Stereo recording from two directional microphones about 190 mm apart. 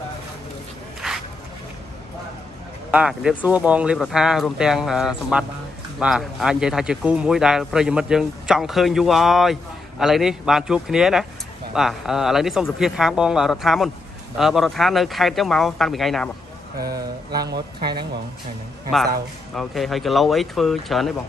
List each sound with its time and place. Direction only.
1.0 s a sound: 5° right (ahead or behind)
2.9 s speech: 5° right (ahead or behind)
17.5 s speech: 55° right (ahead or behind)
19.5 s speech: centre (ahead or behind)